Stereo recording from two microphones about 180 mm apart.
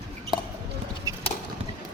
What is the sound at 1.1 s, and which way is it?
Clip-clop, 15° right (ahead or behind).